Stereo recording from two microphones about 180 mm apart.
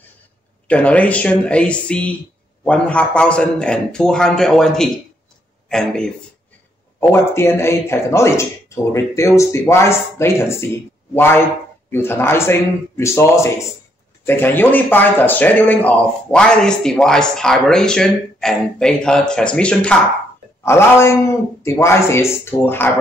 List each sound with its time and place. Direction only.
0.7 s speech: 5° left (ahead or behind)
7.0 s speech: 15° left (ahead or behind)